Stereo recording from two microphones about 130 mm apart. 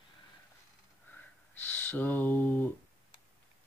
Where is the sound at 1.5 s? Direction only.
15° left (ahead or behind).